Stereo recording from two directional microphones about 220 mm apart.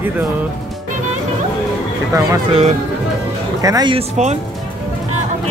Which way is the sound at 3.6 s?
15° right (ahead or behind).